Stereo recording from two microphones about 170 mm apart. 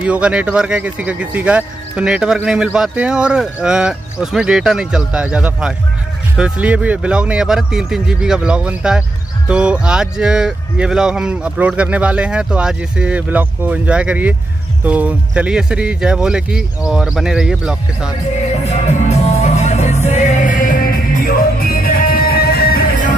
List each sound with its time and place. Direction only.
0.0 s speech: 5° right (ahead or behind)
18.3 s music: 40° left (ahead or behind)